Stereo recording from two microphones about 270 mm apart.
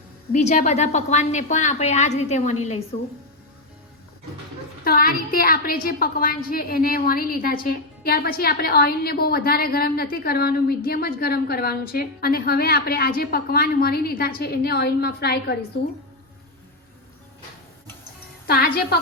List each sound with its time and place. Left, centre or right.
0.3 s a woman's voice: left
4.8 s a woman's voice: left
18.4 s a woman's voice: left